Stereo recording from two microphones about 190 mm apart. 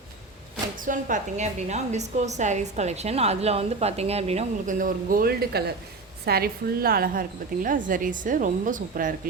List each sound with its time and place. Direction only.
0.9 s a woman's voice: 45° right (ahead or behind)